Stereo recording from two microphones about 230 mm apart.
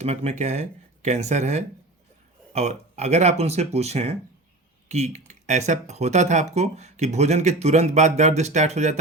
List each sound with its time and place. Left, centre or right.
0.0 s speech: right